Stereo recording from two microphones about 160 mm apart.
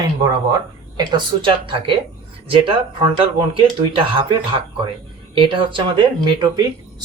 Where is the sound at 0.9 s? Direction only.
30° right (ahead or behind).